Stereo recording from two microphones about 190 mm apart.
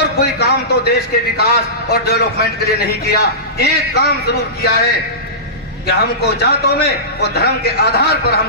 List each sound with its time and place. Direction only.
0.0 s a man's voice: 60° left (ahead or behind)
5.9 s a man's voice: 60° left (ahead or behind)